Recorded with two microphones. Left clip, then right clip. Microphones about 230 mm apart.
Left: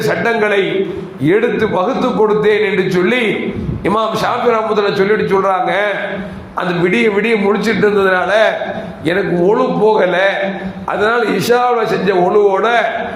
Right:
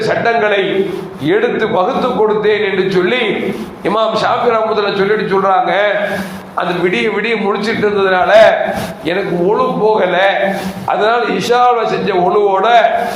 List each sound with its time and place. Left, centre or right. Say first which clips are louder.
0.1 s a man's voice: right 2 dB; left